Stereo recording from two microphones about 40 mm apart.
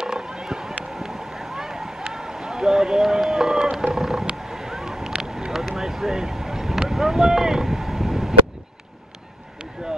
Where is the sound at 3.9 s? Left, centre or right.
Centre.